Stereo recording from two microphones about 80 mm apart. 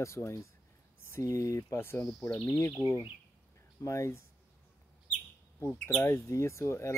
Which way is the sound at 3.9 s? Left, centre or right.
Left.